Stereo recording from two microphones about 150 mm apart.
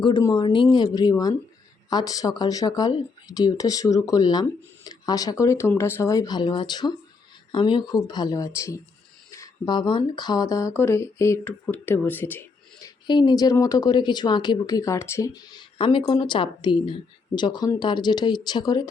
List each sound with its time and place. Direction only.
0.0 s speech: 25° left (ahead or behind)
13.1 s speech: 30° left (ahead or behind)